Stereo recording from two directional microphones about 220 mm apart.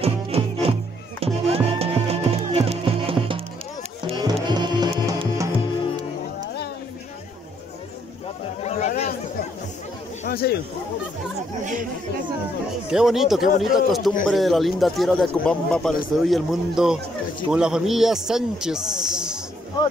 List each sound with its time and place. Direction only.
0.0 s music: 25° right (ahead or behind)
8.6 s chatter: 30° left (ahead or behind)
10.2 s a sound: 45° left (ahead or behind)
11.6 s chatter: 35° right (ahead or behind)
12.9 s speech: centre (ahead or behind)